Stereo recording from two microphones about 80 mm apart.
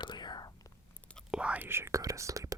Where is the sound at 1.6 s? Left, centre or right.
Right.